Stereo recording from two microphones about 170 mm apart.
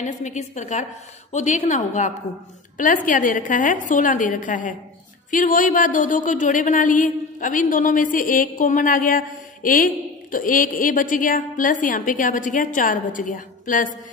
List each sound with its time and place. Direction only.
0.0 s a woman's voice: 45° left (ahead or behind)
3.1 s a woman's voice: 50° left (ahead or behind)